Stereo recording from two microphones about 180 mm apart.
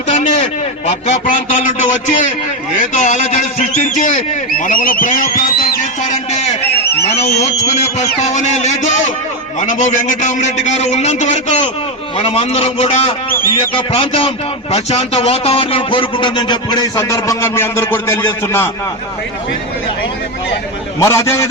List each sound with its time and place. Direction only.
0.1 s a man's voice: 40° left (ahead or behind); by 18.7 s 15° left (ahead or behind)
21.0 s a man's voice: 15° left (ahead or behind)